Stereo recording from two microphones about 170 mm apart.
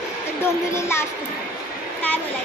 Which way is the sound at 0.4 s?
15° left (ahead or behind).